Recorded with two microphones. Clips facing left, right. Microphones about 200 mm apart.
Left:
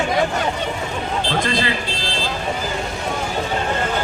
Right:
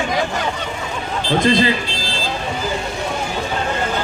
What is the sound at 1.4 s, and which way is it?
Speech, 20° right (ahead or behind).